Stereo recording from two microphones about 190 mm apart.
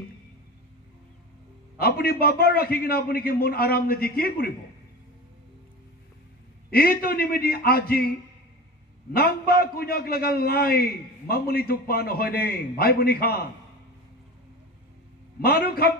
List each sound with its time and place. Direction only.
1.8 s a man's voice: 55° left (ahead or behind)
6.7 s a man's voice: 50° left (ahead or behind)
9.1 s a man's voice: 50° left (ahead or behind)
15.4 s a man's voice: 55° left (ahead or behind)